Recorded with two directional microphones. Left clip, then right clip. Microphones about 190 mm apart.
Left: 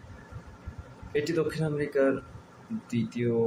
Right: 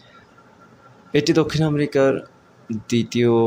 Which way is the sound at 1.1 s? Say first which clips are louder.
Right 10 dB; 50° right (ahead or behind).